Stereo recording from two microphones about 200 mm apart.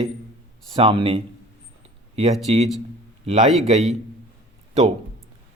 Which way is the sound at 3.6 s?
35° right (ahead or behind).